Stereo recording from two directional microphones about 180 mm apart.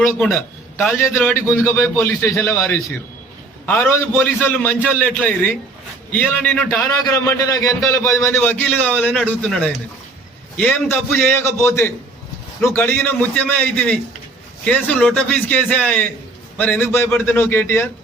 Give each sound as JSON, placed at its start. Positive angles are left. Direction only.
{"t": 0.0, "sound": "a man's voice", "side_deg": 5}